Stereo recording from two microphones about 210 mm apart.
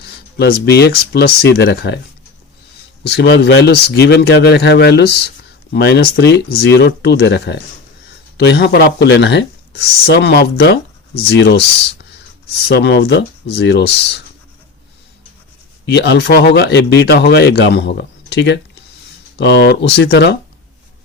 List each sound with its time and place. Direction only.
0.0 s speech: 50° left (ahead or behind)
3.1 s speech: 55° left (ahead or behind)
12.6 s speech: 55° left (ahead or behind)
15.9 s speech: 55° left (ahead or behind)